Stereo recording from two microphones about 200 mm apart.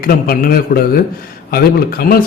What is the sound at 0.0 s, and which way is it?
A man's voice, 45° left (ahead or behind).